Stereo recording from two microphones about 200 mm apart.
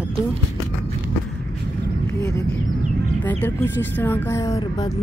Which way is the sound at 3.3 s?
10° left (ahead or behind).